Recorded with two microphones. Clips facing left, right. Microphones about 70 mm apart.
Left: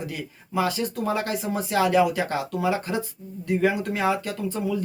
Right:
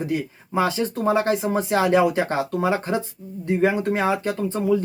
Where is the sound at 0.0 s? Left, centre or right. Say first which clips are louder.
Right 8 dB; right.